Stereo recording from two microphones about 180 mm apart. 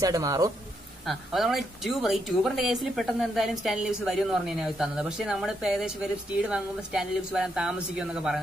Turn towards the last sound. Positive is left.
turn(degrees=-5)  # may be behind; listen again after turning